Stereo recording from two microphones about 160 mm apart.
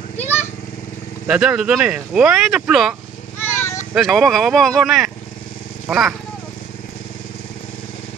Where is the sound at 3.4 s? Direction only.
15° left (ahead or behind).